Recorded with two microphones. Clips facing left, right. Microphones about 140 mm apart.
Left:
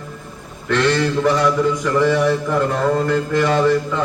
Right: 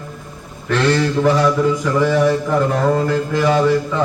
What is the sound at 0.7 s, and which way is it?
Mantra, 10° right (ahead or behind).